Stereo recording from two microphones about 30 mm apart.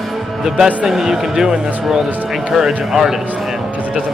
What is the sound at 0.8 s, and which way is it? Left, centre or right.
Speech, centre.